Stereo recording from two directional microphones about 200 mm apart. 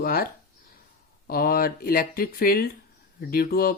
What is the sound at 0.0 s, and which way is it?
Speech, 45° left (ahead or behind).